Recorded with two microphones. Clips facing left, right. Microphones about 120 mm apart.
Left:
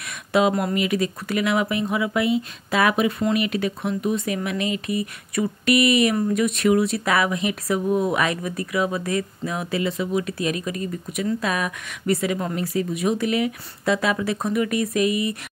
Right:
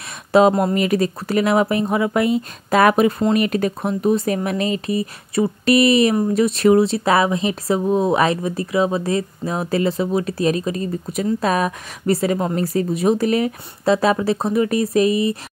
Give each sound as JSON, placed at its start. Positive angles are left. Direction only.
{"t": 0.3, "sound": "speech", "side_deg": -35}